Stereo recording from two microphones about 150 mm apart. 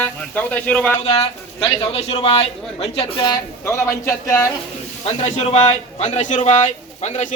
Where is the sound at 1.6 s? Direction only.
40° left (ahead or behind).